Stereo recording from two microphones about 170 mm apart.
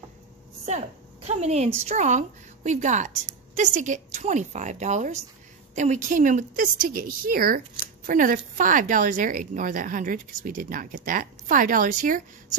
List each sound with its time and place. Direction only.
0.7 s speech: 40° right (ahead or behind)